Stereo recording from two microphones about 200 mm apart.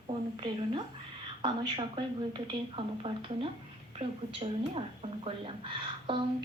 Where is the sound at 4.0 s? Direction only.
30° right (ahead or behind).